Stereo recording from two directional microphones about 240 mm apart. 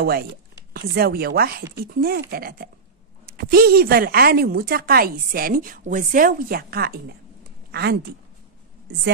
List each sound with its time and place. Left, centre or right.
0.7 s speech: right